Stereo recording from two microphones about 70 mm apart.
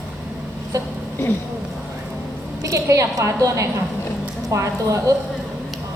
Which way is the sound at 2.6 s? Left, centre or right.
Right.